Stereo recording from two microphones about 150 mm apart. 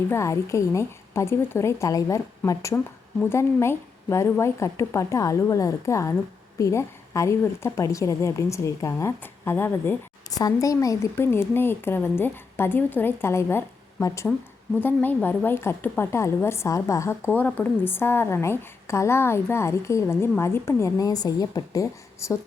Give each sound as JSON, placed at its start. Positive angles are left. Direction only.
{"t": 0.1, "sound": "a woman's voice", "side_deg": 20}